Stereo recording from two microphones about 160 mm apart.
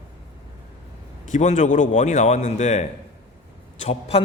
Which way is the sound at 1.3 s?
50° left (ahead or behind).